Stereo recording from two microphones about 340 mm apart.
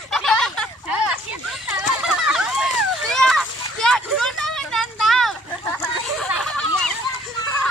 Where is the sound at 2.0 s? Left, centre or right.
Centre.